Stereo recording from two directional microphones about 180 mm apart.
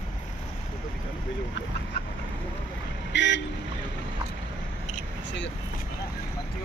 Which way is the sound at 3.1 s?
80° left.